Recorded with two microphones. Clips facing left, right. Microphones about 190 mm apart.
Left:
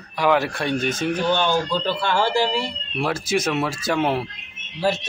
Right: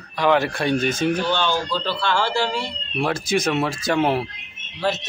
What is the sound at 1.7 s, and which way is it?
Speech, 15° left (ahead or behind).